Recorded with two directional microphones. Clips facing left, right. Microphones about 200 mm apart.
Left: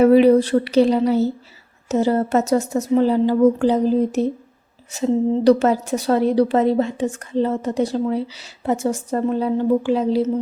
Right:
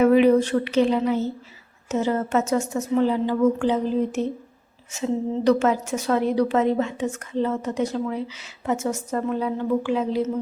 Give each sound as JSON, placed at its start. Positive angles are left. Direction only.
{"t": 0.0, "sound": "a woman's voice", "side_deg": 35}